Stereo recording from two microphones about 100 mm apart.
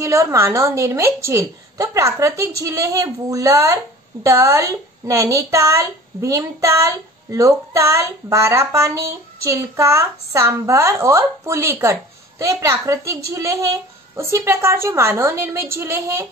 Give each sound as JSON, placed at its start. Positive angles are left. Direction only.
{"t": 0.0, "sound": "a woman's voice", "side_deg": -30}